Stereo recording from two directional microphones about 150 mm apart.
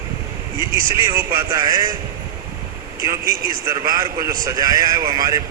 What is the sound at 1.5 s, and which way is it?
Speech, 20° right (ahead or behind).